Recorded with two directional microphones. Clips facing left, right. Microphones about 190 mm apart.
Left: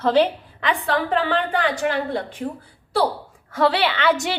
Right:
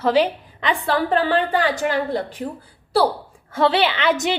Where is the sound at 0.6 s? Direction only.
30° right (ahead or behind).